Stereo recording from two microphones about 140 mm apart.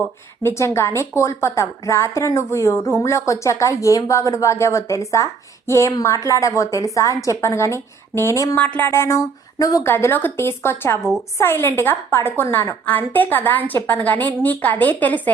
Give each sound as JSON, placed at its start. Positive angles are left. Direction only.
{"t": 0.4, "sound": "a woman's voice", "side_deg": 20}
{"t": 8.5, "sound": "a woman's voice", "side_deg": 10}